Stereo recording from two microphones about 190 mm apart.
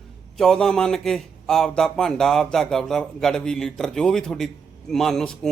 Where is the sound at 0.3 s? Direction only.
Centre (ahead or behind).